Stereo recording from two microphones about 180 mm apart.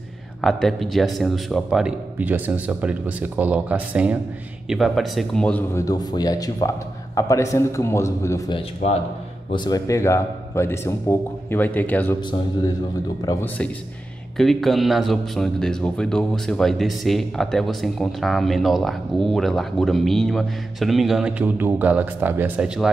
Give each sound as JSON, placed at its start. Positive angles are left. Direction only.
{"t": 0.4, "sound": "a man's voice", "side_deg": 0}
{"t": 8.8, "sound": "speech", "side_deg": 35}
{"t": 9.5, "sound": "a man's voice", "side_deg": 25}
{"t": 13.2, "sound": "speech", "side_deg": 20}
{"t": 14.3, "sound": "speech", "side_deg": 0}